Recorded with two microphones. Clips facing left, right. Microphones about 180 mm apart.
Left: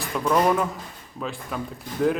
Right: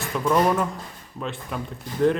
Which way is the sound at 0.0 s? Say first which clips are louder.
Even; centre (ahead or behind).